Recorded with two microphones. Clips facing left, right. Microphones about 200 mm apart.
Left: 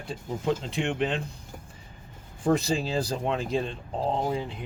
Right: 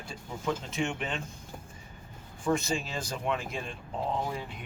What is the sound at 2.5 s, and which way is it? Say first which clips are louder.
Speech: left 5 dB; 35° left (ahead or behind).